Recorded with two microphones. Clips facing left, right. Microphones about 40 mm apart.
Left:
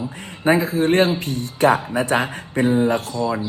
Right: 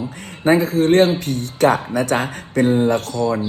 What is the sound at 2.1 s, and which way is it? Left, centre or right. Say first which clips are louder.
Speech: right 1 dB; left.